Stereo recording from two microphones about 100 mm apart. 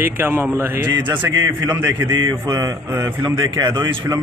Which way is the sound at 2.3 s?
35° right (ahead or behind).